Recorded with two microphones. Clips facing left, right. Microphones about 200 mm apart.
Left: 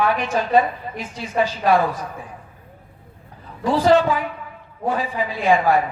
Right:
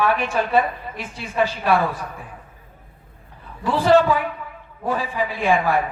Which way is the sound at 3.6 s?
40° left (ahead or behind).